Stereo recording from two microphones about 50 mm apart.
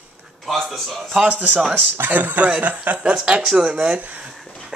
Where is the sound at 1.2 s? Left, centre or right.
Right.